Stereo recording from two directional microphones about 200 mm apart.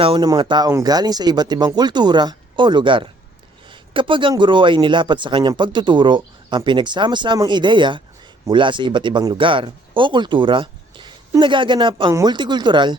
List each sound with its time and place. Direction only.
0.0 s speech: 25° right (ahead or behind)